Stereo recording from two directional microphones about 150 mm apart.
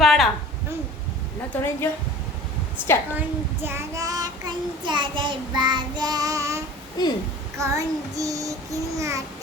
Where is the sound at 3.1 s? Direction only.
15° right (ahead or behind).